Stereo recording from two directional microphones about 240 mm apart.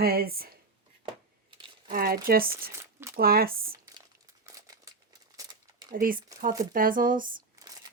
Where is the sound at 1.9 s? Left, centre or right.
Right.